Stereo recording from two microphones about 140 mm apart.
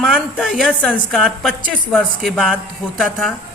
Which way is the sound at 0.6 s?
10° left (ahead or behind).